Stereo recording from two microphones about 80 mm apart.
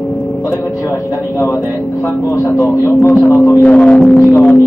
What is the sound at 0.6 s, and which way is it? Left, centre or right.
Speech, left.